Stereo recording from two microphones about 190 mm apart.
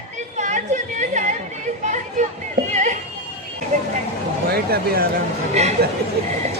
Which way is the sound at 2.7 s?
40° right (ahead or behind).